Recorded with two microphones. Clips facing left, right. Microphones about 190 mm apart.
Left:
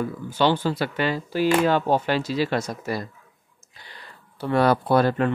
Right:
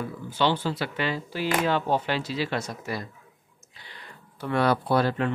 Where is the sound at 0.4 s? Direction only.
45° left (ahead or behind).